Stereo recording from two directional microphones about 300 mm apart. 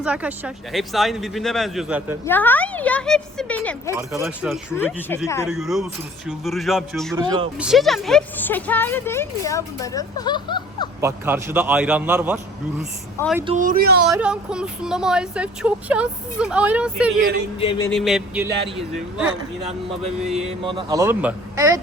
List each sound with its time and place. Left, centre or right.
0.0 s speech: centre
2.2 s speech: centre
7.2 s a man's voice: centre
7.6 s speech: centre
11.0 s a man's voice: centre
13.5 s speech: right
14.0 s speech: centre
17.6 s speech: centre
17.9 s speech: centre
20.4 s a man's voice: centre